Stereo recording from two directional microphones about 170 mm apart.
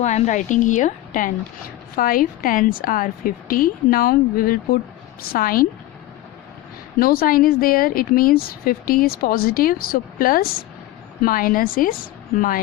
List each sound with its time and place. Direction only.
0.0 s a woman's voice: 45° left (ahead or behind)
7.0 s speech: 60° left (ahead or behind)